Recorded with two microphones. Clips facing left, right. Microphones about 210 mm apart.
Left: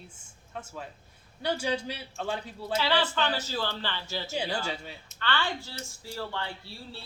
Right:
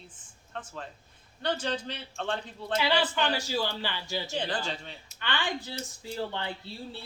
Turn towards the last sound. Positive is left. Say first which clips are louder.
# right 4 dB
turn(degrees=-20)  # may be behind; listen again after turning